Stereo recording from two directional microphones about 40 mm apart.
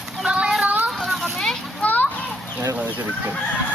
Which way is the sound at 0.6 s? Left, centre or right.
Right.